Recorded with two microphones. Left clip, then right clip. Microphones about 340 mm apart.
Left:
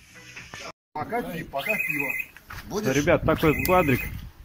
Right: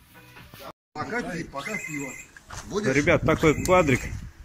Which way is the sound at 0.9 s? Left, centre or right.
Left.